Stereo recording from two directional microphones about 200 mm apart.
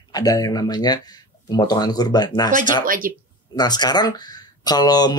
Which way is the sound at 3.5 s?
20° left (ahead or behind).